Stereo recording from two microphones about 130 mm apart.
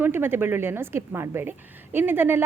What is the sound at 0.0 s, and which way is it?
A woman's voice, 15° right (ahead or behind).